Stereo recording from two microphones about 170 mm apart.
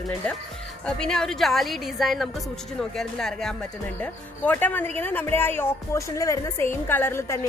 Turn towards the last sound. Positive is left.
turn(degrees=15)  # may be behind; listen again after turning